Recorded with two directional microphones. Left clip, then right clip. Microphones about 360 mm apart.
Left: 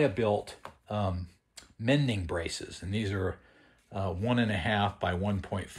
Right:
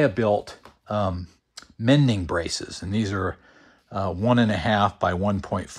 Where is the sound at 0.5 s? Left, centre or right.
Right.